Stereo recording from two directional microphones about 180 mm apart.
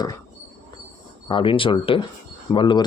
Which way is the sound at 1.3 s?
30° left (ahead or behind).